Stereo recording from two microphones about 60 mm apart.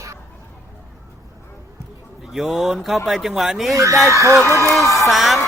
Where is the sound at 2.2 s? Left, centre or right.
Centre.